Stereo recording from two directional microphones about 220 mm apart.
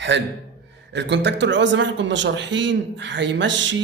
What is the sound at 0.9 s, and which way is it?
Speech, 50° right (ahead or behind).